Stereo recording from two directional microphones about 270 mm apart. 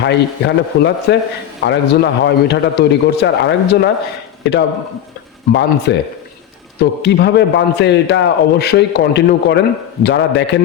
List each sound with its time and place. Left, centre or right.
0.0 s a man's voice: left
5.5 s a man's voice: left